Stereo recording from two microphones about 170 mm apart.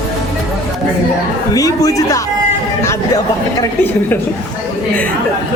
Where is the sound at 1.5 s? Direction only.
20° left (ahead or behind).